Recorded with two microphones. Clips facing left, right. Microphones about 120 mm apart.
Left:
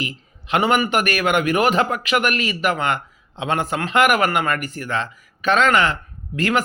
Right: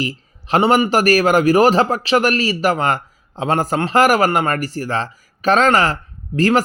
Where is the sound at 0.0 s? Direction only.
35° right (ahead or behind).